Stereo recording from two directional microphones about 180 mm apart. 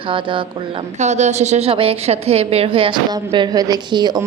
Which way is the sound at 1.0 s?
40° right (ahead or behind).